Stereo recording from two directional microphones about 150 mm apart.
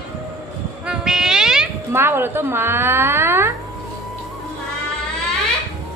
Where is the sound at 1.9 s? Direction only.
15° right (ahead or behind).